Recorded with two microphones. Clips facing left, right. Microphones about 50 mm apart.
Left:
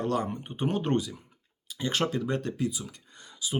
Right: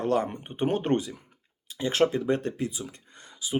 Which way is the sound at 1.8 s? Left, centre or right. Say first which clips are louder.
Right 4 dB; right.